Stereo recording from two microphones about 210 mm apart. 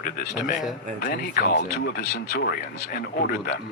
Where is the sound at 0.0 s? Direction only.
45° left (ahead or behind).